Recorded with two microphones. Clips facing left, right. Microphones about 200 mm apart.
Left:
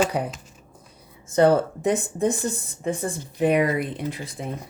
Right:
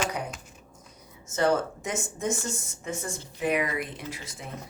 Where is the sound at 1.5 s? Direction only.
35° left (ahead or behind).